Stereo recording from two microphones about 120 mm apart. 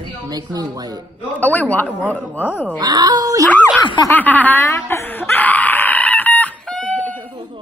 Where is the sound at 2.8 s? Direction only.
35° right (ahead or behind).